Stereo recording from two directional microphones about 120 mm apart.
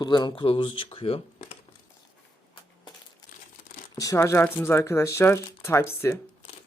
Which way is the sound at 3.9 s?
25° left (ahead or behind).